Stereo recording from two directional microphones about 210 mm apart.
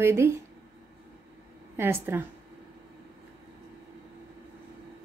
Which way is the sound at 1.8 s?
10° right (ahead or behind).